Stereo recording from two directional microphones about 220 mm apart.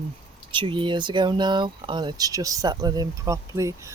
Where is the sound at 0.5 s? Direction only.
20° right (ahead or behind).